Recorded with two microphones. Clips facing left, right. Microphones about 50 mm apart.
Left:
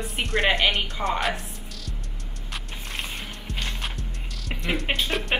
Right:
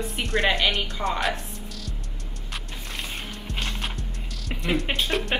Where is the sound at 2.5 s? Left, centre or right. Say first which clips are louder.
Left 1 dB; centre.